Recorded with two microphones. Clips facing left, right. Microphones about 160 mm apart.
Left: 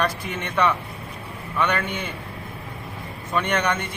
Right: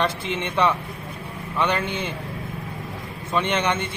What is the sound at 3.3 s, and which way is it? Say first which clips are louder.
Speech: right 1 dB; 25° right (ahead or behind).